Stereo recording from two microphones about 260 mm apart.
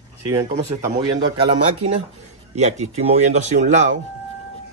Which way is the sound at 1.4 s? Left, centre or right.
Centre.